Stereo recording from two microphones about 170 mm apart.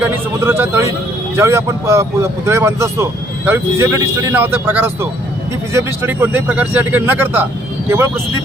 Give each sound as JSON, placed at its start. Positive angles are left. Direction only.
{"t": 0.3, "sound": "speech", "side_deg": -15}